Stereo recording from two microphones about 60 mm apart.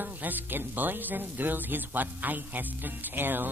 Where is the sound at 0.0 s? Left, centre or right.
Right.